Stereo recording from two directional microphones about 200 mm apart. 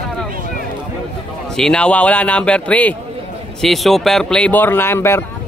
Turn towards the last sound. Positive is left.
turn(degrees=10)  # may be behind; listen again after turning